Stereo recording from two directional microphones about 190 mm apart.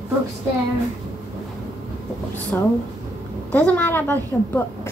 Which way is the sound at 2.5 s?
10° left (ahead or behind).